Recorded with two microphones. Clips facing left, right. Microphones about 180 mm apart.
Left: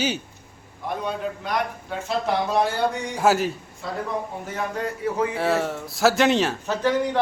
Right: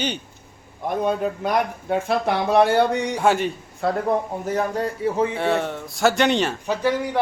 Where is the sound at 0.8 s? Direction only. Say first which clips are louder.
Right 5 dB; 50° right (ahead or behind); by 3.1 s 65° right (ahead or behind).